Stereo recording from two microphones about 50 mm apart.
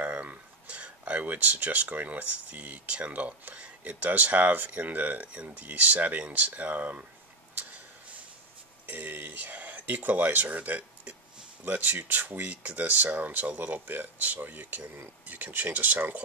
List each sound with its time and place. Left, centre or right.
0.0 s speech: right
8.8 s a sound: right
11.6 s speech: right